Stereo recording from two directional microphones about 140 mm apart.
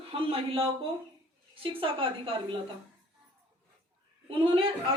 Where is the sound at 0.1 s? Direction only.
40° right (ahead or behind).